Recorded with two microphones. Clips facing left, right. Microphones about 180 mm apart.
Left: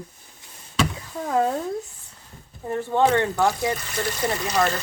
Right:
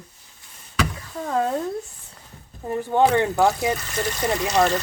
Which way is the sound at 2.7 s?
15° right (ahead or behind).